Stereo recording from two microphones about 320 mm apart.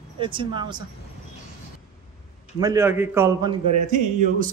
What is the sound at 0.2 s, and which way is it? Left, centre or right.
Speech, centre.